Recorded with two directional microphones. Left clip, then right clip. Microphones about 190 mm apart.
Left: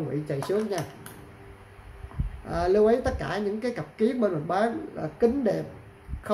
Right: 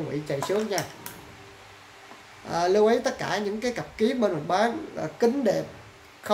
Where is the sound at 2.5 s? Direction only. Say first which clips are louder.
Right 1 dB; 5° left (ahead or behind).